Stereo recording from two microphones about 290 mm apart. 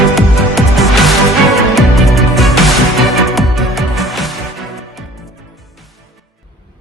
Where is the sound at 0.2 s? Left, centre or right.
Centre.